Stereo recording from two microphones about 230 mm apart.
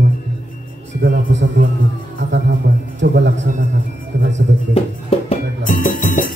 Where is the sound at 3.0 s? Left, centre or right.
Right.